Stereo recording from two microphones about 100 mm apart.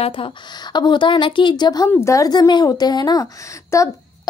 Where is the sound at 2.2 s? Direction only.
45° left (ahead or behind).